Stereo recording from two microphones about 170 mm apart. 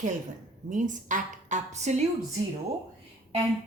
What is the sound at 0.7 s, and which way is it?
A woman's voice, 50° right (ahead or behind).